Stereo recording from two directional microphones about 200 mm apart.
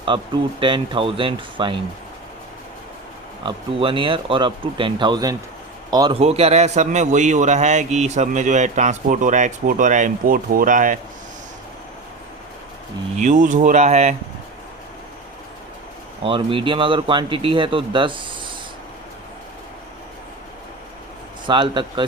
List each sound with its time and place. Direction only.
0.1 s speech: 25° right (ahead or behind)
3.4 s a man's voice: 25° right (ahead or behind); by 10.9 s 40° right (ahead or behind)
13.1 s a man's voice: 40° right (ahead or behind)
16.2 s speech: 25° right (ahead or behind)
21.4 s speech: 25° right (ahead or behind)